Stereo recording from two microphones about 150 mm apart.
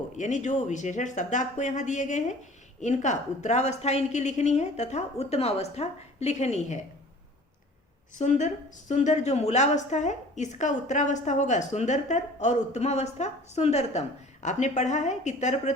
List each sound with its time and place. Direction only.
0.2 s a woman's voice: 55° left (ahead or behind)
8.2 s a woman's voice: 55° left (ahead or behind)